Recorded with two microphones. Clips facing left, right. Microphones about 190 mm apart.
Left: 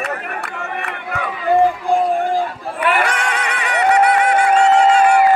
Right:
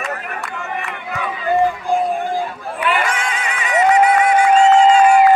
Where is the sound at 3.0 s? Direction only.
65° left (ahead or behind).